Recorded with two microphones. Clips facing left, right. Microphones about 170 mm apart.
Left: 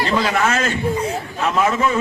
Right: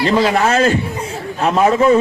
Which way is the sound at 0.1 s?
35° right (ahead or behind).